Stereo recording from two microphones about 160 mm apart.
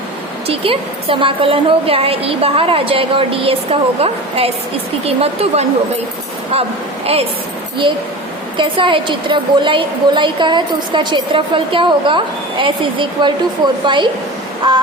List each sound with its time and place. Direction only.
0.4 s a woman's voice: 35° right (ahead or behind)
8.5 s a woman's voice: 30° right (ahead or behind)